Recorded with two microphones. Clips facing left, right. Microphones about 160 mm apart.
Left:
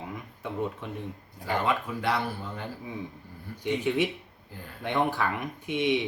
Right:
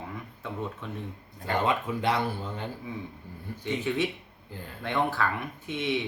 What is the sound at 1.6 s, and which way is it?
Speech, 20° right (ahead or behind).